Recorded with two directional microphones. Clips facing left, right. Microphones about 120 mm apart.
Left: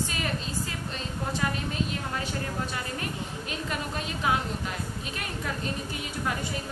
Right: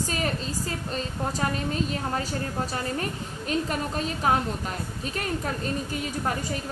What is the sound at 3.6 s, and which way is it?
Speech, 40° right (ahead or behind).